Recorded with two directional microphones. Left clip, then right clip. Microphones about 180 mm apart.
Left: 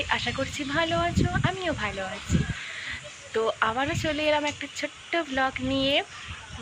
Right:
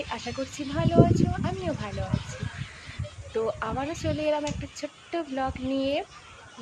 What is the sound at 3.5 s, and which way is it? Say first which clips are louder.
Speech: left 5 dB; centre (ahead or behind).